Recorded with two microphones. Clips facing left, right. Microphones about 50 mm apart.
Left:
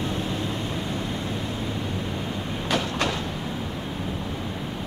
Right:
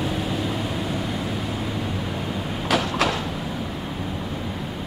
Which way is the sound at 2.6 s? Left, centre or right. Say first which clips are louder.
Right 4 dB; right.